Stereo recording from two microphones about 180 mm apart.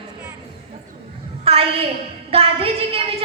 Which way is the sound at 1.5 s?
30° right (ahead or behind).